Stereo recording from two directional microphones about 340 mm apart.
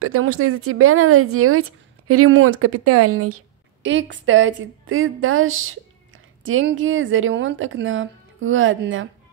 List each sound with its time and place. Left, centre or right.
0.0 s speech: right